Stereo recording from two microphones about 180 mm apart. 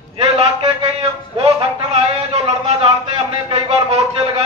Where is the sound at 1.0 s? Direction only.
35° right (ahead or behind).